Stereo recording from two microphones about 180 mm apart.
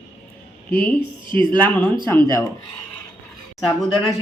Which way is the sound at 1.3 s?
25° right (ahead or behind).